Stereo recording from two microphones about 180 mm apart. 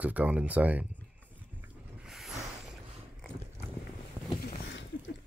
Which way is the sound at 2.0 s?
Centre (ahead or behind).